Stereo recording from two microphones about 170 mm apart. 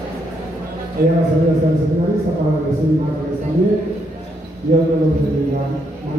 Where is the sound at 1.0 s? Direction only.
60° right (ahead or behind).